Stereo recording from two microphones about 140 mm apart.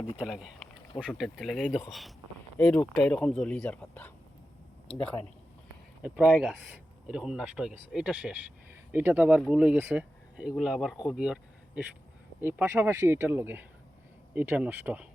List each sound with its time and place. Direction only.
0.2 s speech: 5° right (ahead or behind)
6.4 s speech: 5° right (ahead or behind)
12.4 s speech: 15° right (ahead or behind)